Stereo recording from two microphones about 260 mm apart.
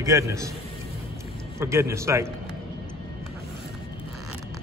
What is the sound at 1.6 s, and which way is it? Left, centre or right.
Speech, centre.